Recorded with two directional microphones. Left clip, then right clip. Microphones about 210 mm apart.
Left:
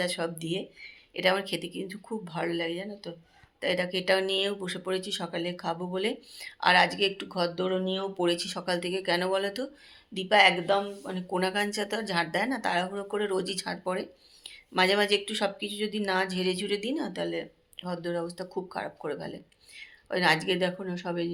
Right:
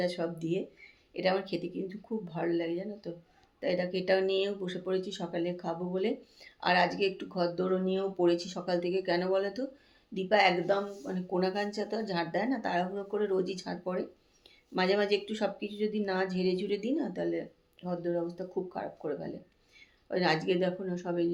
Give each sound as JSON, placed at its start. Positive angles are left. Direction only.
{"t": 0.0, "sound": "speech", "side_deg": 5}